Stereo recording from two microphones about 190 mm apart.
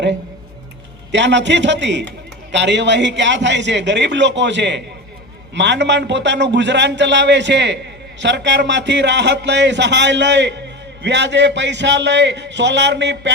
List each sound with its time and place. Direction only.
1.1 s a man's voice: 70° right (ahead or behind)